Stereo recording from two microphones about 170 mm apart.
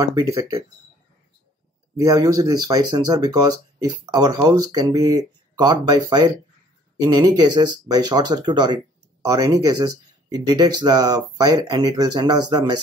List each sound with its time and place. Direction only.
0.0 s speech: 20° right (ahead or behind)
2.0 s speech: 20° right (ahead or behind)